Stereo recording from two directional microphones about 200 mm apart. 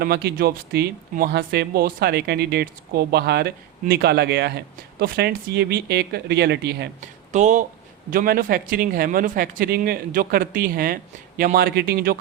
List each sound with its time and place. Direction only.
0.0 s speech: 50° right (ahead or behind)
7.0 s speech: 40° right (ahead or behind)